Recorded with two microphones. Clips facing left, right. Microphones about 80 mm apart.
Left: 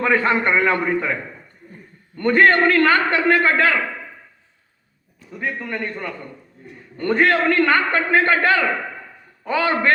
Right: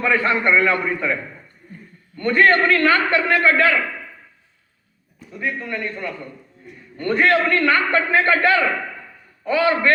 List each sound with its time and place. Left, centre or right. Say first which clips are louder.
0.0 s a man's voice: left 1 dB; left
2.1 s a man's voice: left 1 dB; left
5.4 s a man's voice: even; left